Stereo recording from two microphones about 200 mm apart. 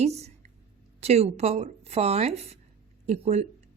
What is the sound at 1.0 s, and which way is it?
A woman's voice, 30° right (ahead or behind).